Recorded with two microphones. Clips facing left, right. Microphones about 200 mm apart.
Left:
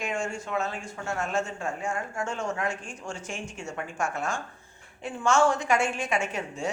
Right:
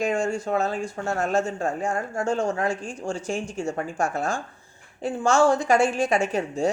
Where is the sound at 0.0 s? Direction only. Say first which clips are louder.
Right 7 dB; 35° right (ahead or behind).